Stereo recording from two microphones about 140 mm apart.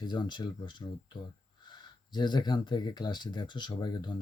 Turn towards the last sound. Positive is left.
turn(degrees=30)  # may be behind; listen again after turning